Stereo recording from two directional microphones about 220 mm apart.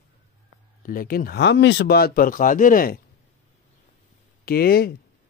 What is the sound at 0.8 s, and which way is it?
Speech, 40° left (ahead or behind).